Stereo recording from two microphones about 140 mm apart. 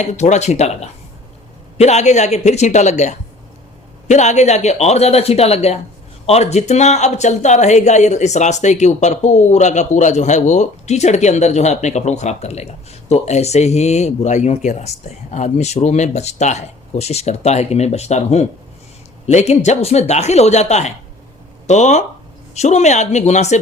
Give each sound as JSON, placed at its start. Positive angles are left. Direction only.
{"t": 0.0, "sound": "a man's voice", "side_deg": 55}